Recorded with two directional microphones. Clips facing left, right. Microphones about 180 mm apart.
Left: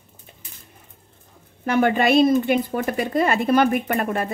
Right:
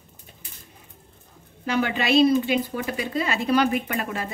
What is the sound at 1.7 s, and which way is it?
A woman's voice, 50° left (ahead or behind).